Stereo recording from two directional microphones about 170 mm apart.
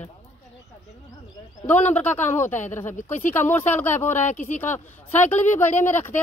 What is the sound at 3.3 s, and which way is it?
Speech, 10° left (ahead or behind).